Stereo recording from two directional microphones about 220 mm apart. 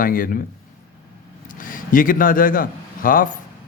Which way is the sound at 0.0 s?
40° left (ahead or behind).